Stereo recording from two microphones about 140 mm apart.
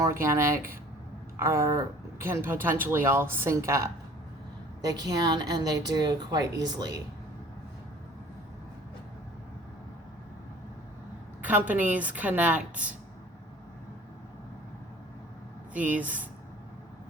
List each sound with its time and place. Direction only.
0.0 s a woman's voice: 20° right (ahead or behind)
11.7 s speech: 10° right (ahead or behind)
15.7 s speech: 10° right (ahead or behind)